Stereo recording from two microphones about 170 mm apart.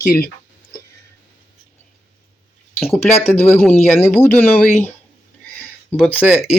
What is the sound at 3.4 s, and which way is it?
Speech, 10° left (ahead or behind).